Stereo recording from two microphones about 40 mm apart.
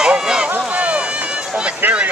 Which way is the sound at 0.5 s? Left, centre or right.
Right.